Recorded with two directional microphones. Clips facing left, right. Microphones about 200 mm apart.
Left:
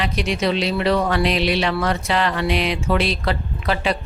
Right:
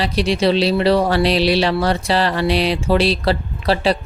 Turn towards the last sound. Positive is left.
turn(degrees=-35)  # may be behind; listen again after turning